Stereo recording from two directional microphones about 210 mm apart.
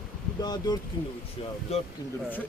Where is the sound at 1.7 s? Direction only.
30° left (ahead or behind).